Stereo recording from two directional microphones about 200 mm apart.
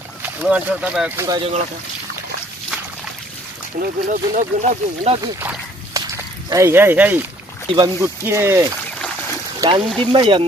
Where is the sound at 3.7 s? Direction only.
40° right (ahead or behind).